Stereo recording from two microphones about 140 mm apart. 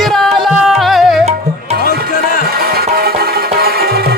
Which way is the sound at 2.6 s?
90° right.